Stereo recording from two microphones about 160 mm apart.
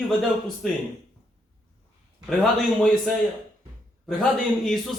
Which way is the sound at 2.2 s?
5° left (ahead or behind).